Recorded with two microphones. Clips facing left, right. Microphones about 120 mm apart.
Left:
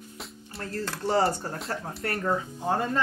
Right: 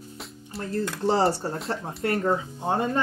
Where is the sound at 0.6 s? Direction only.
25° right (ahead or behind).